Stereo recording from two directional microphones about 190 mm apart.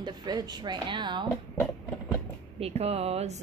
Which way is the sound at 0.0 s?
20° right (ahead or behind).